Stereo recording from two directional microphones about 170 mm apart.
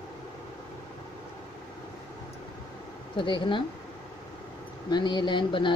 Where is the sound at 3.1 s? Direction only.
30° left (ahead or behind).